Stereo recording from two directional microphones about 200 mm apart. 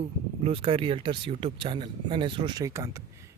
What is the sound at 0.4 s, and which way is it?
Speech, 30° right (ahead or behind).